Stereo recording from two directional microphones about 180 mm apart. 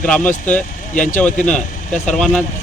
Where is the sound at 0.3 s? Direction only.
45° left (ahead or behind).